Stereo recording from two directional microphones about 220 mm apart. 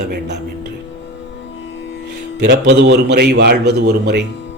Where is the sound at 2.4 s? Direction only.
50° right (ahead or behind).